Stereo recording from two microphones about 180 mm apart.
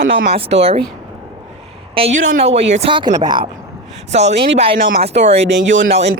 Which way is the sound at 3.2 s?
25° right (ahead or behind).